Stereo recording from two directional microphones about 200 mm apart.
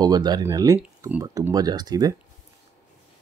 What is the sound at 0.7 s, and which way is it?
Speech, 10° right (ahead or behind).